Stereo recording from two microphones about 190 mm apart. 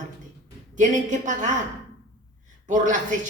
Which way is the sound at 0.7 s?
40° right (ahead or behind).